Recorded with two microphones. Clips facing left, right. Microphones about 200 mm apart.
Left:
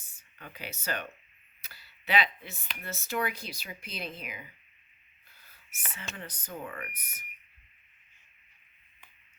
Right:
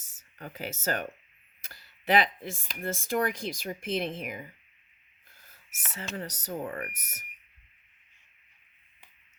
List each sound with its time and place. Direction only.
0.0 s a sound: 90° right
0.3 s speech: 45° right (ahead or behind)
6.1 s speech: 40° right (ahead or behind)